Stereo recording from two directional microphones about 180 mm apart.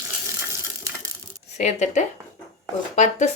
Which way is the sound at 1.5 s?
40° left (ahead or behind).